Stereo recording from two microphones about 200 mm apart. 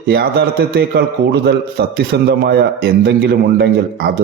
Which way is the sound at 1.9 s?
55° right (ahead or behind).